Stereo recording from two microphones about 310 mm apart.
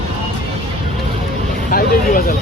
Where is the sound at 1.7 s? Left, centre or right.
Left.